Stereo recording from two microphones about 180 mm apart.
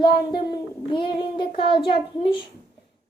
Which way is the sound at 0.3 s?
25° left (ahead or behind).